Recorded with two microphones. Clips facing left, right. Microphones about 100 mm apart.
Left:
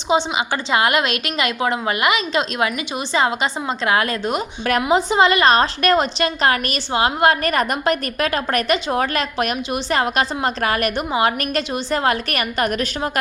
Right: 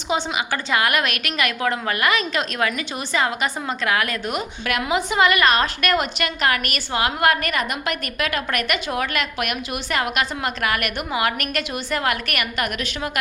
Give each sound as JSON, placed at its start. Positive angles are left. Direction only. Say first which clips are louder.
{"t": 0.1, "sound": "a woman's voice", "louder": "left 4 dB", "side_deg": 25}
{"t": 7.5, "sound": "a woman's voice", "louder": "left 6 dB", "side_deg": 40}